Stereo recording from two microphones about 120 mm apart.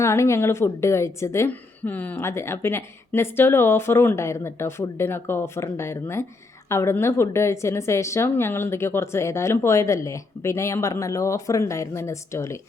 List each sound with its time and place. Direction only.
0.0 s a woman's voice: 25° left (ahead or behind)